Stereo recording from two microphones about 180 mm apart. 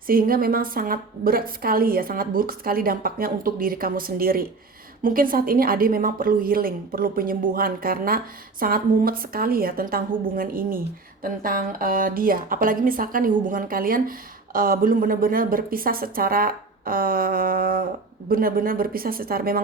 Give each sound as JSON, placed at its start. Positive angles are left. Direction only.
{"t": 0.1, "sound": "a woman's voice", "side_deg": -55}